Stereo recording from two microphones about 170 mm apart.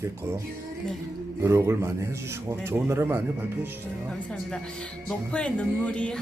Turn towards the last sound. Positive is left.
turn(degrees=5)  # may be behind; listen again after turning